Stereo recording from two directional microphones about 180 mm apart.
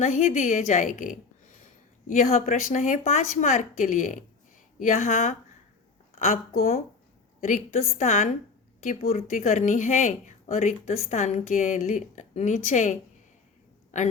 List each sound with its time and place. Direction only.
0.0 s a woman's voice: 45° left (ahead or behind)